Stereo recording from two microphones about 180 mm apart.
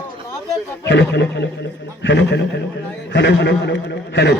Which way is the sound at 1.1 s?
70° left (ahead or behind).